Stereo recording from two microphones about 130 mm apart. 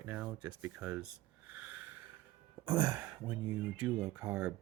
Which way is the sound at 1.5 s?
15° right (ahead or behind).